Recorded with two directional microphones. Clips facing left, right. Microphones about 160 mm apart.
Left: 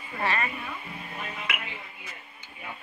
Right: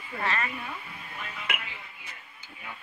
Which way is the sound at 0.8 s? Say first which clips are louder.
Left 4 dB; 30° left (ahead or behind).